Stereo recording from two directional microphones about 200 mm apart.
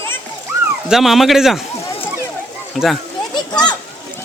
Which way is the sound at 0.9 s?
Centre (ahead or behind).